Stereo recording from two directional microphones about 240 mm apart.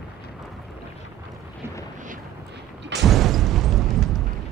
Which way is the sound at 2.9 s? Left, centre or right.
Centre.